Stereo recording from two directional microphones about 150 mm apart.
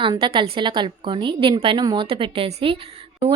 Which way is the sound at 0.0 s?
35° right (ahead or behind).